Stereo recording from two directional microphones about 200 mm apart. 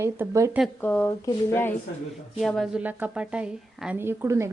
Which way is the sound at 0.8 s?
10° left (ahead or behind).